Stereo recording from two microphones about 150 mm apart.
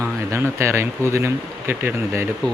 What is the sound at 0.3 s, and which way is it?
Speech, 15° right (ahead or behind).